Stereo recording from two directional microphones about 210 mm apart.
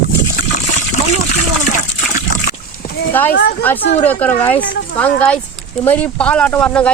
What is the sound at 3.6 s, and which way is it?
Speech, 10° left (ahead or behind).